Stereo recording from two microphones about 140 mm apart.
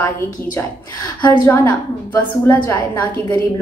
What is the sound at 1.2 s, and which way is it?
A woman's voice, 15° left (ahead or behind).